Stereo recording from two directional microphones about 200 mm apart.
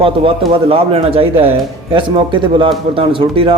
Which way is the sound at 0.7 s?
30° right (ahead or behind).